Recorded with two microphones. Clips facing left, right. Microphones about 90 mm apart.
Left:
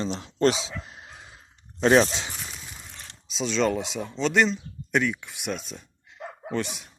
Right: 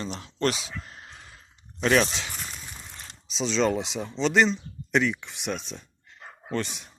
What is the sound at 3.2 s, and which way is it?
Speech, centre (ahead or behind).